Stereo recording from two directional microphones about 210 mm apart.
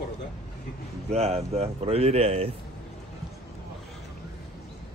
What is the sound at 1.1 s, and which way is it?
Speech, 30° right (ahead or behind).